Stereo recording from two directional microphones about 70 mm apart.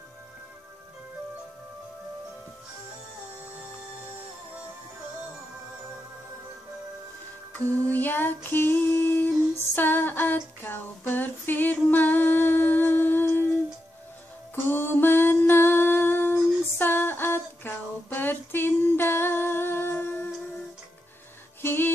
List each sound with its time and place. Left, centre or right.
7.5 s female singing: left
14.5 s a sound: left
21.5 s music: left